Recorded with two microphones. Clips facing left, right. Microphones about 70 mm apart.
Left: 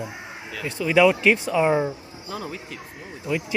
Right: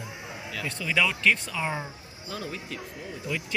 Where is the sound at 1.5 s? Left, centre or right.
Left.